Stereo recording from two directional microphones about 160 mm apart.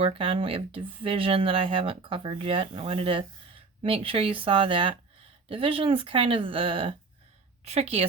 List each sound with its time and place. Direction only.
0.0 s speech: 35° right (ahead or behind)